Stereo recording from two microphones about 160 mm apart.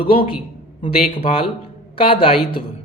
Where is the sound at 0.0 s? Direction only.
35° left (ahead or behind).